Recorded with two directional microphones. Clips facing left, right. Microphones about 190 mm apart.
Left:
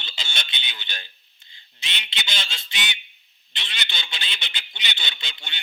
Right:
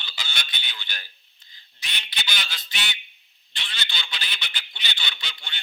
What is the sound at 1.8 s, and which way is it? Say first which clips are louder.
Goose: left 1 dB; 20° left (ahead or behind).